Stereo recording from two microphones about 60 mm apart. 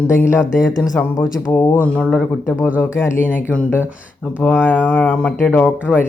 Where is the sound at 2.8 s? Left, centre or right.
Left.